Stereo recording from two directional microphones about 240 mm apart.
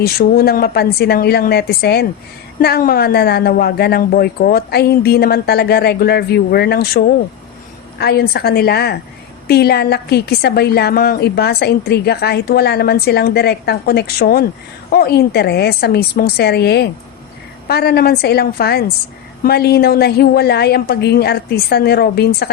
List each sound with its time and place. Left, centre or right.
0.0 s a woman's voice: left